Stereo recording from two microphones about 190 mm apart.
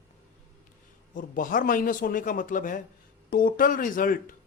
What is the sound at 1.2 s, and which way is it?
Speech, 45° left (ahead or behind).